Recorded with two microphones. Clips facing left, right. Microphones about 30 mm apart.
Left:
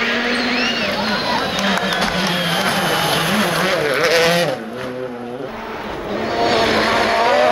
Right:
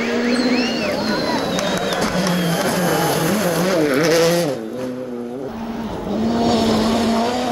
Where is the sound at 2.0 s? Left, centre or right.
Left.